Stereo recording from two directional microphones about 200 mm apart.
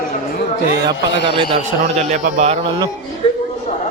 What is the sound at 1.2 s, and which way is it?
A man's voice, 25° right (ahead or behind).